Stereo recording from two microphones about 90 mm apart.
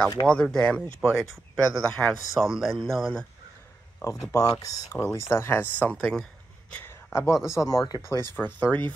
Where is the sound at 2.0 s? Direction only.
10° left (ahead or behind).